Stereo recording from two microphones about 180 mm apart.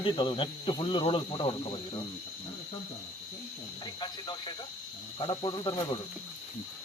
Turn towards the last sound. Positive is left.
turn(degrees=25)  # may be behind; listen again after turning